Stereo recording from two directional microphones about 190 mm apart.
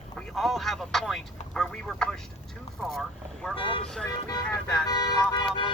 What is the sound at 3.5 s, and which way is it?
Speech, 30° left (ahead or behind).